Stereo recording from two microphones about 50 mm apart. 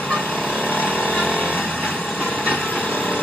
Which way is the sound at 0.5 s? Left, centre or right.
Left.